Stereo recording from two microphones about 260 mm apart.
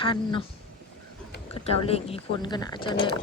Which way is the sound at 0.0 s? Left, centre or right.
Centre.